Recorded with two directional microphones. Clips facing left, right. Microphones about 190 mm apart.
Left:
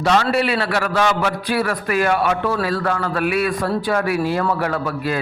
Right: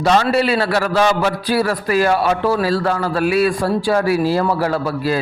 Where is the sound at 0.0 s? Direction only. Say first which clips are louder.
Right 2 dB; 35° right (ahead or behind).